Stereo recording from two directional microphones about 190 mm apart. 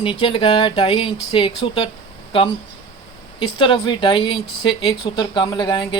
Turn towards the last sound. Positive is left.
turn(degrees=25)  # may be behind; listen again after turning